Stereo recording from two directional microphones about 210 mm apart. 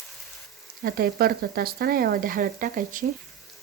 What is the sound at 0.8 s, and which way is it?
Speech, 45° right (ahead or behind).